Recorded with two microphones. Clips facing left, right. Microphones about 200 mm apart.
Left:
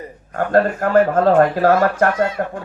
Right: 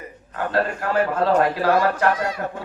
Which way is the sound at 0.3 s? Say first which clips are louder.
Left 7 dB; 50° left (ahead or behind).